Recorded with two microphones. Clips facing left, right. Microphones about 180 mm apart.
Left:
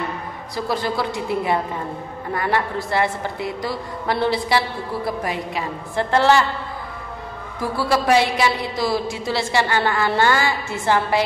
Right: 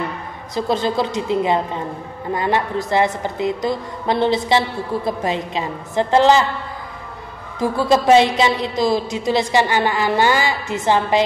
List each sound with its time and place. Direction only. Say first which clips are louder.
0.6 s a woman's voice: right 4 dB; 20° right (ahead or behind)
7.6 s a woman's voice: right 4 dB; 20° right (ahead or behind)